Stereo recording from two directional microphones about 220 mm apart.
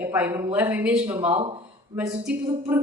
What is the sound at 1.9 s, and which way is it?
Speech, 5° right (ahead or behind).